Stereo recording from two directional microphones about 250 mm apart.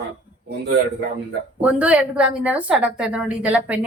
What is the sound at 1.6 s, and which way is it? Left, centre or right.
A woman's voice, centre.